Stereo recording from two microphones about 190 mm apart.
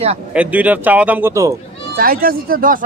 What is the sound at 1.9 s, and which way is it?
Speech, 50° right (ahead or behind).